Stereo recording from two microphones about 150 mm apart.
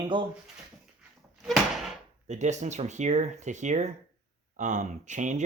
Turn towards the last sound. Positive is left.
turn(degrees=-55)  # may be behind; listen again after turning